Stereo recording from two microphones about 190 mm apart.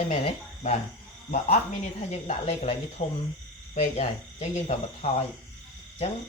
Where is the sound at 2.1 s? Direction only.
35° left (ahead or behind).